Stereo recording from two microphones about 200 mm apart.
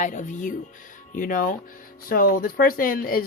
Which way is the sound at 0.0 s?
40° left (ahead or behind).